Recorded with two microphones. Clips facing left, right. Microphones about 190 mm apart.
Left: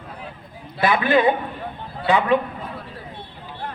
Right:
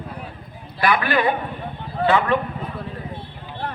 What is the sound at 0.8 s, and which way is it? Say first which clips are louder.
A man's voice: left 2 dB; 20° left (ahead or behind).